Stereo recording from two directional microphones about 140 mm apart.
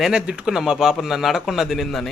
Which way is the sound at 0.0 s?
5° right (ahead or behind).